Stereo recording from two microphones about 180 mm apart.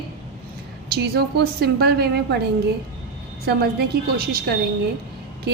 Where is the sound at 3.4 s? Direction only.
60° right (ahead or behind).